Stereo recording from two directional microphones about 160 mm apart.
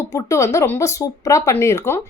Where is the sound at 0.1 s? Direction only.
20° left (ahead or behind).